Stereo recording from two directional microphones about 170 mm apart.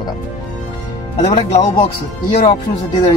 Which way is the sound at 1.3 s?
40° left (ahead or behind).